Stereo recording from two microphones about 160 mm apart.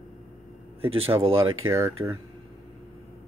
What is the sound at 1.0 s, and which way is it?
Speech, 35° right (ahead or behind).